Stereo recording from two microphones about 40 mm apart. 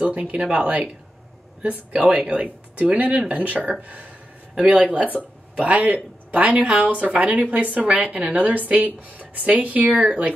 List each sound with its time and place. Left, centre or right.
0.0 s speech: right
4.6 s speech: right
9.8 s speech: right